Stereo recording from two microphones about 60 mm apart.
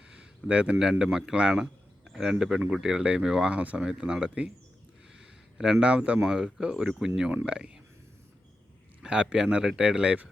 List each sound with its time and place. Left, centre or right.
0.1 s a sound: centre
0.8 s a man's voice: centre
3.6 s speech: right
5.5 s speech: centre
9.0 s a sound: centre
9.2 s speech: centre